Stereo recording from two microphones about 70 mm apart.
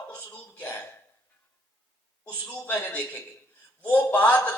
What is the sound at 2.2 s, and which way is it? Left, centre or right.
A man's voice, left.